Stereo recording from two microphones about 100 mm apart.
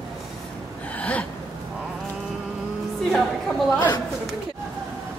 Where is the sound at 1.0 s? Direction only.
15° left (ahead or behind).